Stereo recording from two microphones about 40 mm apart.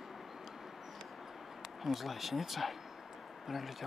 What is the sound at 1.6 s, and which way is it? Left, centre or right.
Speech, centre.